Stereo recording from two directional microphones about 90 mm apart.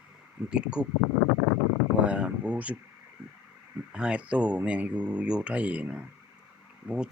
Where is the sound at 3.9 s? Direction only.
10° right (ahead or behind).